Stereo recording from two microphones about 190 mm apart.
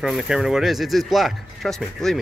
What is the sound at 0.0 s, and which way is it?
Speech, centre (ahead or behind).